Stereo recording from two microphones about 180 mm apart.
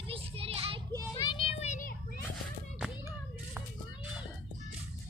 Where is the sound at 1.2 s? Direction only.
35° left (ahead or behind).